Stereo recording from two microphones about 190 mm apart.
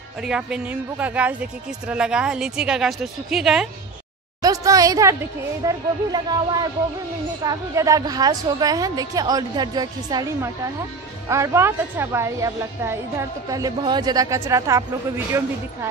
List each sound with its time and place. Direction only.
0.2 s speech: 5° right (ahead or behind)
4.4 s a woman's voice: 20° right (ahead or behind)